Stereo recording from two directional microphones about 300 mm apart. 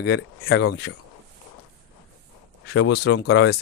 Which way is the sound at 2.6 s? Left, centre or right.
Left.